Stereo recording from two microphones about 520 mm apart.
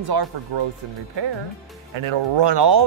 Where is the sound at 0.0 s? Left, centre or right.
Right.